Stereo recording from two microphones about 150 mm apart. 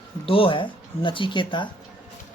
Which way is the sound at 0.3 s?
35° left (ahead or behind).